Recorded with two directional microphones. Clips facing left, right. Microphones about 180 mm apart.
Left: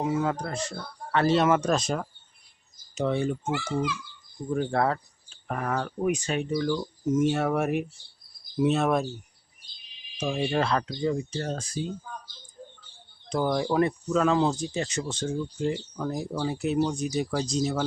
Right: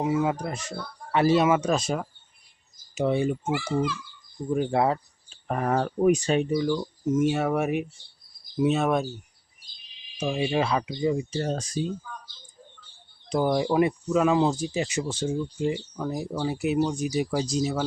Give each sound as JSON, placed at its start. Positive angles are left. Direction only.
{"t": 0.0, "sound": "speech", "side_deg": -10}
{"t": 5.5, "sound": "speech", "side_deg": -35}
{"t": 6.4, "sound": "speech", "side_deg": -15}
{"t": 6.7, "sound": "speech", "side_deg": -5}
{"t": 10.2, "sound": "speech", "side_deg": -5}
{"t": 13.3, "sound": "speech", "side_deg": -10}